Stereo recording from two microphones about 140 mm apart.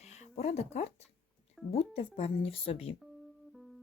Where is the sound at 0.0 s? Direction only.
50° left (ahead or behind).